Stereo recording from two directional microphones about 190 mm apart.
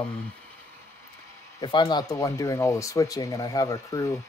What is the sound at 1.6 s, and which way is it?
Speech, 25° left (ahead or behind).